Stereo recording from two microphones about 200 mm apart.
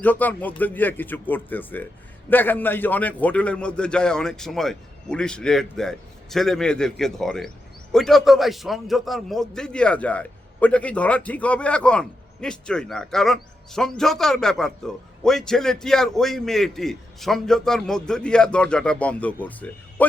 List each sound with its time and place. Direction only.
0.0 s a man's voice: 10° left (ahead or behind)